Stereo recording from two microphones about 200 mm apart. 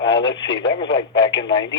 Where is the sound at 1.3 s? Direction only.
65° left (ahead or behind).